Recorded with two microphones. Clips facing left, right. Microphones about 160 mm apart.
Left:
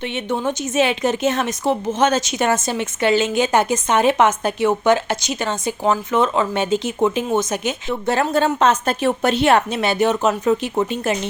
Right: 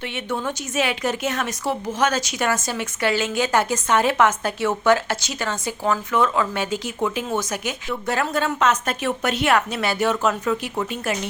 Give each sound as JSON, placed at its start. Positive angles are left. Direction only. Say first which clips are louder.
{"t": 0.3, "sound": "a woman's voice", "louder": "left 5 dB", "side_deg": 20}